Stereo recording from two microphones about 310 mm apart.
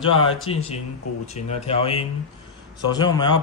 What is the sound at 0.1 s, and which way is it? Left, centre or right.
Speech, centre.